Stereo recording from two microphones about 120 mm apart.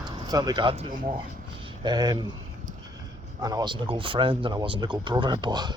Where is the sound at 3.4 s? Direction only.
35° right (ahead or behind).